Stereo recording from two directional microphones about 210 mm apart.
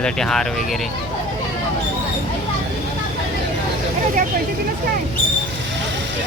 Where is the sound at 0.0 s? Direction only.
Centre (ahead or behind).